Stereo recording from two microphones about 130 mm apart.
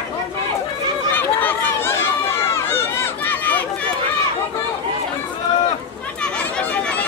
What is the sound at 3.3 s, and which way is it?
Chatter, 15° left (ahead or behind).